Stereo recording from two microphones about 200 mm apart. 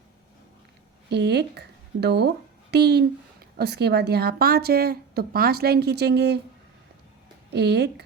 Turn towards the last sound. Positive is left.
turn(degrees=-55)  # may be behind; listen again after turning